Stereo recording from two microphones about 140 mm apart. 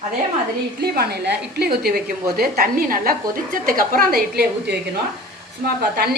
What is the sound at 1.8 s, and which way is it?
A woman's voice, 90° right.